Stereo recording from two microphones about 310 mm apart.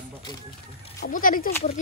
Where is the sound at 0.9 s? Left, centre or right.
Left.